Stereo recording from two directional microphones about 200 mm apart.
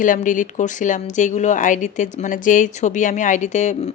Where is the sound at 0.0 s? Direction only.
40° left (ahead or behind).